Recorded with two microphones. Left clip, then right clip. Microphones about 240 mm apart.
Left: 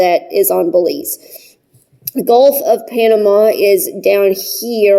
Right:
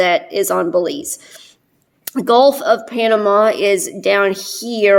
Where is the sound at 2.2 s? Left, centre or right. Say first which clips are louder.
Left 2 dB; right.